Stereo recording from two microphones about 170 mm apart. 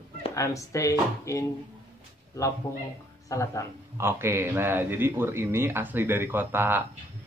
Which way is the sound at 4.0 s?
15° right (ahead or behind).